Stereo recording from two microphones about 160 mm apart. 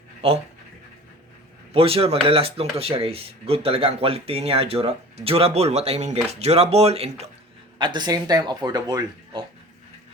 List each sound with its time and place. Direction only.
0.2 s speech: 35° right (ahead or behind)
1.7 s speech: 35° right (ahead or behind)
7.8 s speech: 30° right (ahead or behind)